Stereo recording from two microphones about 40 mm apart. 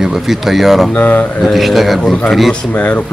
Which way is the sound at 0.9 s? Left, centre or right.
Left.